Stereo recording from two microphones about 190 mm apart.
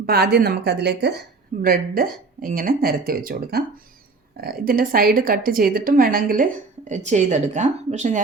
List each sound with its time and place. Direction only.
0.0 s a woman's voice: 55° right (ahead or behind)
1.6 s a woman's voice: 50° right (ahead or behind)